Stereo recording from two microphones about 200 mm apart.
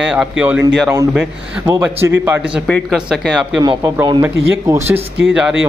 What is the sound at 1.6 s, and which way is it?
Speech, 15° right (ahead or behind).